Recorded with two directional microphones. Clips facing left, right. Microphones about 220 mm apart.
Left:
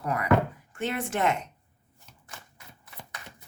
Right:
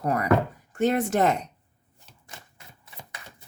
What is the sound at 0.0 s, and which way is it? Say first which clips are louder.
Speech: right 2 dB; 40° right (ahead or behind).